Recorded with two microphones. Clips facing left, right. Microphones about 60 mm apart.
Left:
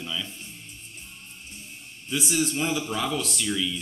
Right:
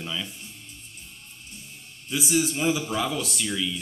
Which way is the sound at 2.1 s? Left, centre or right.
Centre.